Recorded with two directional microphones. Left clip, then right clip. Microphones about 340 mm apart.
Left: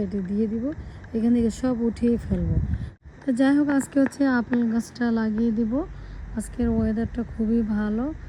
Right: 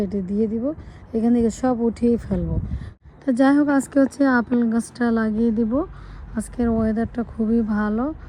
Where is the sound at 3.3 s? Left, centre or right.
Centre.